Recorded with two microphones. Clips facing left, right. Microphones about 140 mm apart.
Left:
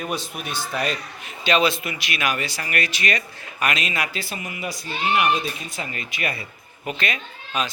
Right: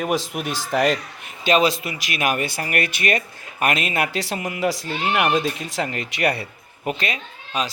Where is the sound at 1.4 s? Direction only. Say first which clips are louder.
Right 2 dB; 40° right (ahead or behind); by 6.9 s 65° right (ahead or behind).